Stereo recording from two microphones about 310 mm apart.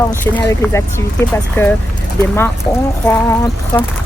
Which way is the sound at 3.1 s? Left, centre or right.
Centre.